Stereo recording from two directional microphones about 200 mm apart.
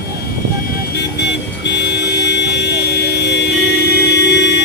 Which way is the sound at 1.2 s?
60° left (ahead or behind).